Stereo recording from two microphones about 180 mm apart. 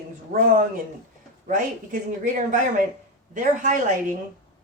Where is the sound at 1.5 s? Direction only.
45° right (ahead or behind).